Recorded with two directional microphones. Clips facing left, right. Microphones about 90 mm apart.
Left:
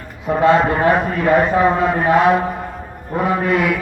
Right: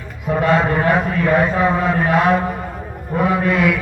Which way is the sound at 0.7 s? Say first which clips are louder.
Left 1 dB; 20° left (ahead or behind).